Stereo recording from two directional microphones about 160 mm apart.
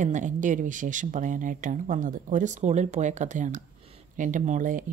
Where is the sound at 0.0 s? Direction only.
50° right (ahead or behind).